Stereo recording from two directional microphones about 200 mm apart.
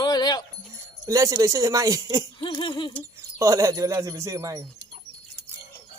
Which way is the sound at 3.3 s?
15° right (ahead or behind).